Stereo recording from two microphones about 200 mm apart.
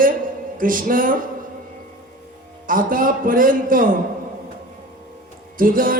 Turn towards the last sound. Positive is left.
turn(degrees=-45)  # may be behind; listen again after turning